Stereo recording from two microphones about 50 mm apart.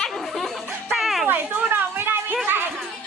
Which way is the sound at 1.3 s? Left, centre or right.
Right.